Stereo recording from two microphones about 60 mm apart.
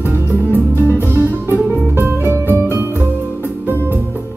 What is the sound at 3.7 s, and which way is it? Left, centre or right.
Music, left.